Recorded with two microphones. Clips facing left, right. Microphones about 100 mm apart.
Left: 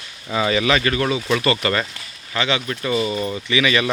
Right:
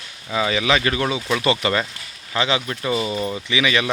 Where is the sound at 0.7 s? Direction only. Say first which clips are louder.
Left 1 dB; 15° right (ahead or behind).